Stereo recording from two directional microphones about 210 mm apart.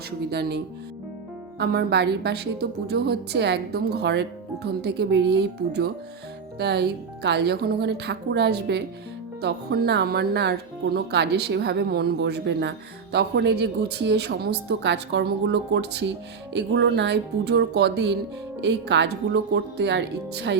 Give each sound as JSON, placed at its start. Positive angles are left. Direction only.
{"t": 0.3, "sound": "a woman's voice", "side_deg": -50}